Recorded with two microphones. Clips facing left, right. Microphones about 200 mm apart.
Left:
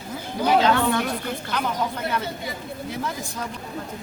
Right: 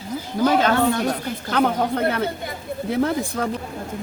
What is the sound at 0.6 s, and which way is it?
Speech, 50° right (ahead or behind).